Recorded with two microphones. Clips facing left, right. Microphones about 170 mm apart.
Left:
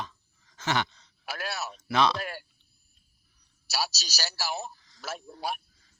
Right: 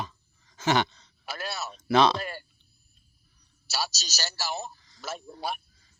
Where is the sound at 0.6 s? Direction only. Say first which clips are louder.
Right 4 dB; 20° right (ahead or behind).